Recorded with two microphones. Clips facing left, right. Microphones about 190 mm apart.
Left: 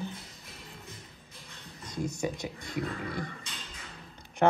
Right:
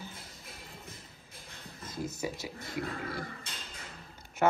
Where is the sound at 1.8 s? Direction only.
5° right (ahead or behind).